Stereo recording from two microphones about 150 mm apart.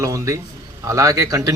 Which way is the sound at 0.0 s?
20° right (ahead or behind).